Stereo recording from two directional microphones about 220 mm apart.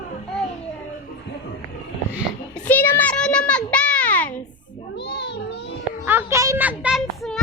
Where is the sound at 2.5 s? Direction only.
5° left (ahead or behind).